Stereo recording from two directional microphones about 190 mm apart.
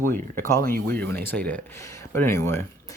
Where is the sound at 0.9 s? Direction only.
10° left (ahead or behind).